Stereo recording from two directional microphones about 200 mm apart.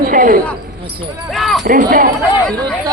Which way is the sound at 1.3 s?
Centre (ahead or behind).